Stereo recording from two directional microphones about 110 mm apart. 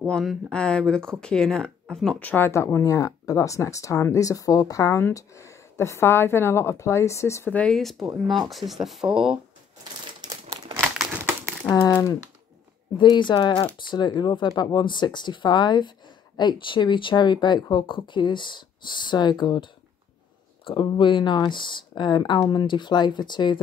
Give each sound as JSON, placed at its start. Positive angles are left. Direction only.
{"t": 0.1, "sound": "speech", "side_deg": 0}
{"t": 7.5, "sound": "speech", "side_deg": 5}
{"t": 12.9, "sound": "speech", "side_deg": 45}